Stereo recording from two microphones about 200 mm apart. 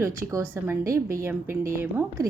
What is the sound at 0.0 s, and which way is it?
A woman's voice, 15° right (ahead or behind).